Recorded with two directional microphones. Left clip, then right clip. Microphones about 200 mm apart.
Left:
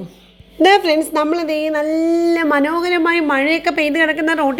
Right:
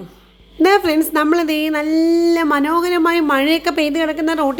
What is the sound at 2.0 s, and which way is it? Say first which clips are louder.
Speech: right 3 dB; 25° right (ahead or behind).